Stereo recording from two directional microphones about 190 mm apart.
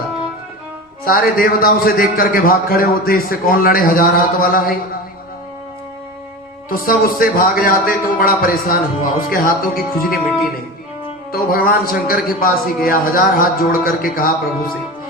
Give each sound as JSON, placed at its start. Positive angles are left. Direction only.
{"t": 1.0, "sound": "a man's voice", "side_deg": 50}
{"t": 6.7, "sound": "a man's voice", "side_deg": 50}
{"t": 10.1, "sound": "music", "side_deg": -5}
{"t": 11.3, "sound": "a man's voice", "side_deg": 50}